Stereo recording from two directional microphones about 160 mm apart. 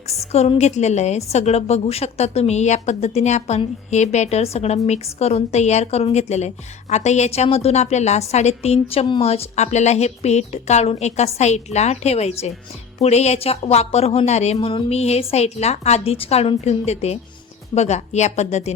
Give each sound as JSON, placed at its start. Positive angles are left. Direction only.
{"t": 0.2, "sound": "a woman's voice", "side_deg": 40}